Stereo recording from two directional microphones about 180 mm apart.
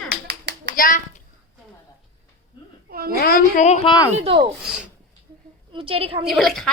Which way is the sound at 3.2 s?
55° left (ahead or behind).